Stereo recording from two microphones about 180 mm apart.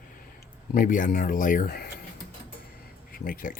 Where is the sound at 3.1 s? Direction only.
50° left (ahead or behind).